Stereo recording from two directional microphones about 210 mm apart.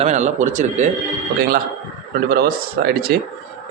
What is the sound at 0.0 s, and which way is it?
Speech, 35° right (ahead or behind).